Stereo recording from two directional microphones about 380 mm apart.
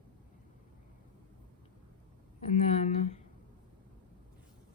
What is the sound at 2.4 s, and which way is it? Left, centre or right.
Speech, centre.